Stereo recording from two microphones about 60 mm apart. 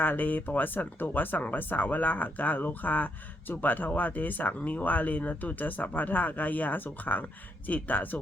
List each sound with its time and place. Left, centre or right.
0.0 s speech: left